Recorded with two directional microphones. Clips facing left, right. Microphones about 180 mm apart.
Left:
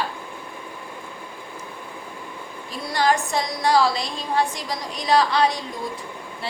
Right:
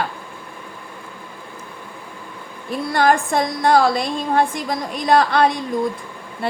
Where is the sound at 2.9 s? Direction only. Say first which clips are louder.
Right 4 dB; 55° right (ahead or behind).